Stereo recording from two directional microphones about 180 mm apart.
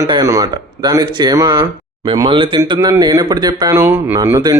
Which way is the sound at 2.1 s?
25° right (ahead or behind).